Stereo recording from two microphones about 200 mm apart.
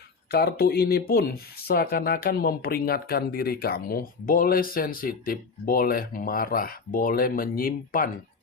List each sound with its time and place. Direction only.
0.3 s speech: 55° left (ahead or behind)